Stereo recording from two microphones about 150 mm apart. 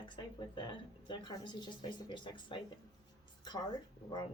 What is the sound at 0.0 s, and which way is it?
A woman's voice, 30° left (ahead or behind).